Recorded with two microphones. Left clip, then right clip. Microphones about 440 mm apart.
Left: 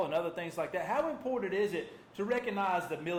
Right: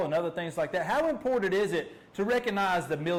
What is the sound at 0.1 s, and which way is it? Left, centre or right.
A man's voice, right.